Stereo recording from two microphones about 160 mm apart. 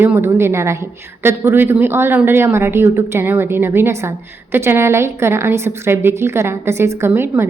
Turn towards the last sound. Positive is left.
turn(degrees=-15)  # may be behind; listen again after turning